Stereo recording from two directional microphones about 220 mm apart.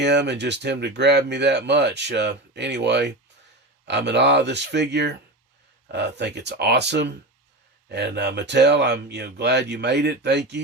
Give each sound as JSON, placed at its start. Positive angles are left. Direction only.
{"t": 0.0, "sound": "speech", "side_deg": -50}